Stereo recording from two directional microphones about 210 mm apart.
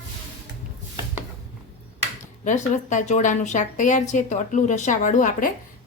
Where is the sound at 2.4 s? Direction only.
35° left (ahead or behind).